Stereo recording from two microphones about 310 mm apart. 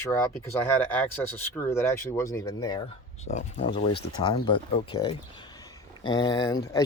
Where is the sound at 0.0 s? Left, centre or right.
Centre.